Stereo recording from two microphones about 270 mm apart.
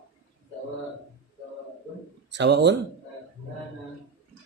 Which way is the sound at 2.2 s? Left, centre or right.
Right.